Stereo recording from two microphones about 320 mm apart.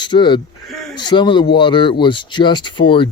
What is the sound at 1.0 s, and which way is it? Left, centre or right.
Speech, centre.